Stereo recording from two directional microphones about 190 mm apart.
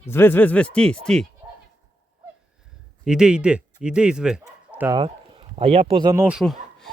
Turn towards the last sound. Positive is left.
turn(degrees=0)  # may be behind; listen again after turning